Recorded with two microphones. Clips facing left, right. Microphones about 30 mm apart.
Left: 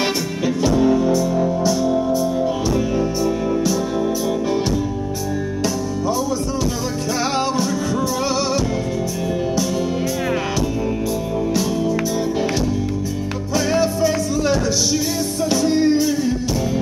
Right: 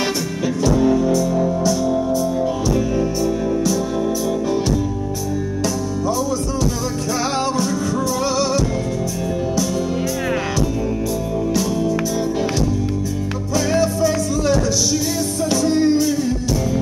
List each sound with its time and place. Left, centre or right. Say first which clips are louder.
0.6 s music: even; centre
13.7 s music: even; centre